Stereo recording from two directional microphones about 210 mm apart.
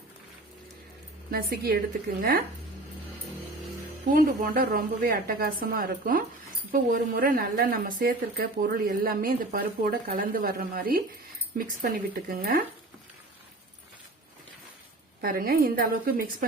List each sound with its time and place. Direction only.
1.3 s a woman's voice: 45° right (ahead or behind)
4.0 s a woman's voice: 40° right (ahead or behind)
15.2 s a woman's voice: 45° right (ahead or behind)